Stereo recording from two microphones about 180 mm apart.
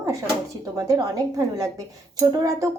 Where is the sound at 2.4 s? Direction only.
20° right (ahead or behind).